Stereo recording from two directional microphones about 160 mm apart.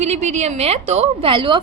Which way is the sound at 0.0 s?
45° right (ahead or behind).